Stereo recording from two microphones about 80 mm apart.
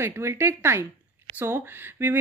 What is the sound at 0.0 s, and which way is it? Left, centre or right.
Speech, right.